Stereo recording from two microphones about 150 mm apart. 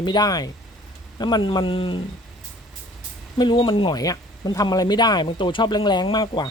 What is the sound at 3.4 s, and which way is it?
Speech, 35° left (ahead or behind).